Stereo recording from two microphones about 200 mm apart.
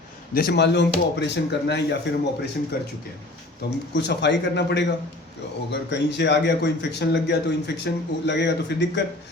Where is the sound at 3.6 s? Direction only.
55° left (ahead or behind).